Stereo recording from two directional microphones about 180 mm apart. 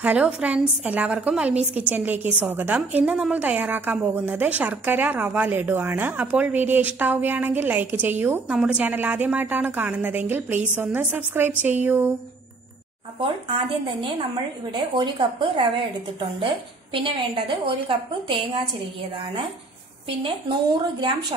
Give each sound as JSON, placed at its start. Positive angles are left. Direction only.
{"t": 0.0, "sound": "a woman's voice", "side_deg": -5}
{"t": 14.0, "sound": "a woman's voice", "side_deg": -25}